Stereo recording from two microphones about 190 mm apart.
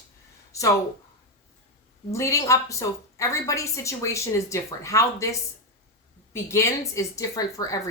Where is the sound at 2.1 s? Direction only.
15° left (ahead or behind).